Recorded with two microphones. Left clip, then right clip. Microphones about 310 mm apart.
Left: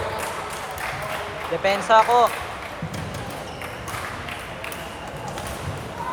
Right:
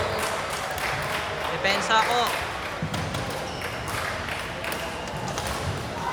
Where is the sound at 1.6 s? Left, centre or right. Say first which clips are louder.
Left 5 dB; centre.